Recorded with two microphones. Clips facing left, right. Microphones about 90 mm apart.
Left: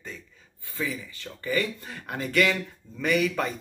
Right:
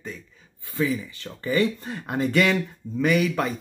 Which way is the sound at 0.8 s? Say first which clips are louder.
Right 7 dB; 25° right (ahead or behind).